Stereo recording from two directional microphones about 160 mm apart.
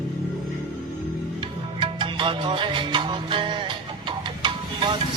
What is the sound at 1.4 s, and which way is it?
Music, 30° right (ahead or behind).